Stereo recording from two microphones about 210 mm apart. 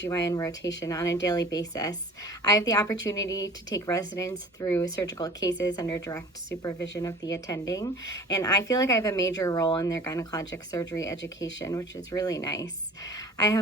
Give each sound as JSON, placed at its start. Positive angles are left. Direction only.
{"t": 0.1, "sound": "a woman's voice", "side_deg": 15}